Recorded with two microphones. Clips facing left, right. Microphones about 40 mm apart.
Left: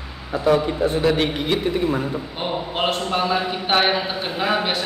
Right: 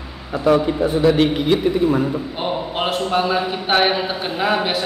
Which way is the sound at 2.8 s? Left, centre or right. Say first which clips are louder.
Right 2 dB; centre.